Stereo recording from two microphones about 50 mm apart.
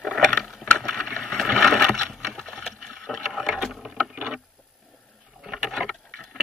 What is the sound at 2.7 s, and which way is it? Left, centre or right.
Boat, centre.